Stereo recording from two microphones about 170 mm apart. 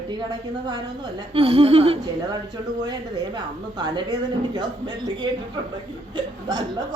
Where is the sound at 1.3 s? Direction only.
35° right (ahead or behind).